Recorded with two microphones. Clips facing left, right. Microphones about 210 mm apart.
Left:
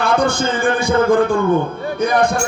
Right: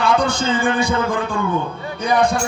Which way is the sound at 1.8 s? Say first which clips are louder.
Left 2 dB; 45° left (ahead or behind).